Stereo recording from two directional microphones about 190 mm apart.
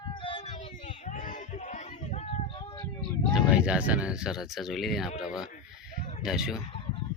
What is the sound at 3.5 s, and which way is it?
Speech, 5° right (ahead or behind).